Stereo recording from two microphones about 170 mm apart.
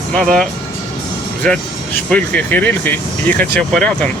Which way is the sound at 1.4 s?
5° left (ahead or behind).